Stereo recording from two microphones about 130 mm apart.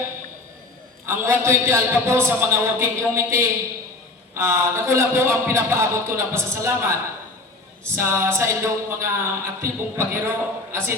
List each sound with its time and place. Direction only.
1.0 s a man's voice: 20° right (ahead or behind)
7.9 s a man's voice: 20° right (ahead or behind)